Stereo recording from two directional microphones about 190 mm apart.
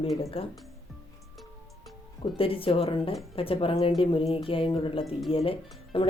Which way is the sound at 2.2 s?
30° left (ahead or behind).